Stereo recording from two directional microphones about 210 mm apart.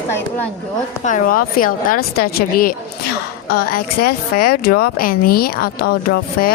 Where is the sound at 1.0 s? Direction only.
40° left (ahead or behind).